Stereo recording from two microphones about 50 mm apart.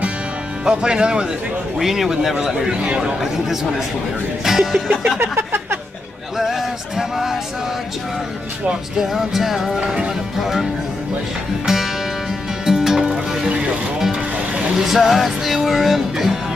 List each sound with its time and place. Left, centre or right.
0.7 s a man's voice: centre
1.8 s a man's voice: centre
5.2 s a sound: right
6.3 s music: centre
9.1 s music: centre
14.8 s music: centre